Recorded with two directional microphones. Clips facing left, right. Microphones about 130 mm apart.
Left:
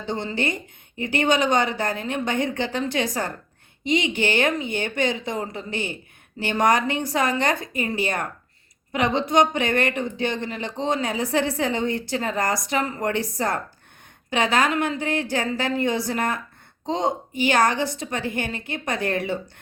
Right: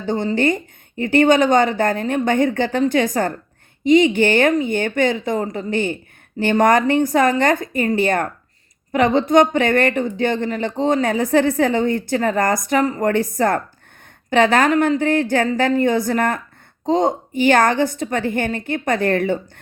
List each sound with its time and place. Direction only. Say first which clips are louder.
0.0 s speech: right 8 dB; 45° right (ahead or behind)